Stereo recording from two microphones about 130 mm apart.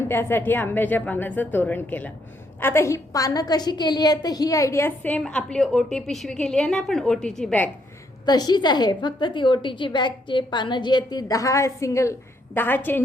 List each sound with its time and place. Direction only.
0.1 s a woman's voice: 15° left (ahead or behind)
8.2 s a woman's voice: 30° left (ahead or behind); by 13.0 s 15° left (ahead or behind)